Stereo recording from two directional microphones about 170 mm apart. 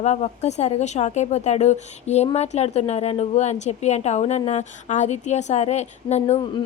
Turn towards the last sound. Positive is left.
turn(degrees=40)  # may be behind; listen again after turning